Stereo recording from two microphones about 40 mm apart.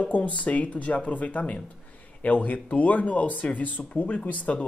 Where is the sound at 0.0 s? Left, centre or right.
Left.